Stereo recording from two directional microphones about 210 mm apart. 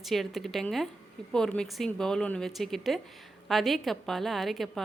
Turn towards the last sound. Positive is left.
turn(degrees=0)  # may be behind; listen again after turning